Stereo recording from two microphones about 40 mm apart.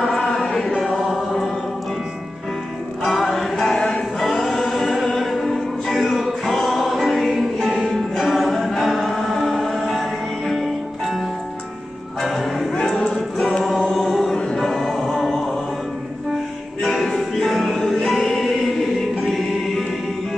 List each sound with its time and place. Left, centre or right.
0.0 s chant: centre
0.9 s music: centre
3.1 s music: centre
3.7 s music: centre
4.2 s music: centre
7.9 s a capella: centre
12.2 s music: centre
12.7 s music: centre
13.7 s music: centre
14.3 s music: centre
14.6 s music: centre
16.8 s music: centre
19.1 s choir: centre